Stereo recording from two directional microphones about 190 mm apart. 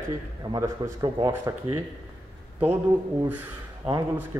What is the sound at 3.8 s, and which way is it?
Speech, 30° right (ahead or behind).